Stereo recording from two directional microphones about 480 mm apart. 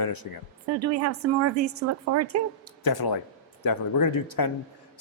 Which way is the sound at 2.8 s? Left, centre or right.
Left.